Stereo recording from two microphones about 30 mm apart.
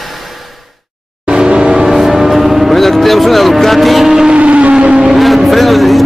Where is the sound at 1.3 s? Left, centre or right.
Right.